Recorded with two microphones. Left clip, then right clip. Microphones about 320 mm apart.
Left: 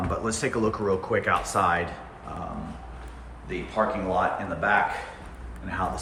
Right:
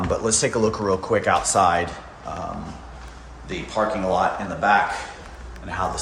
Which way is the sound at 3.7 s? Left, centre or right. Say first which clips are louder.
Right 4 dB; centre.